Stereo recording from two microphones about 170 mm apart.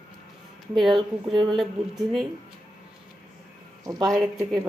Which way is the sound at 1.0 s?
30° right (ahead or behind).